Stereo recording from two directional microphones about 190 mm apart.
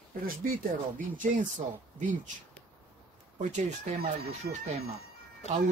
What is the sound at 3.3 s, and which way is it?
Speech, 40° right (ahead or behind).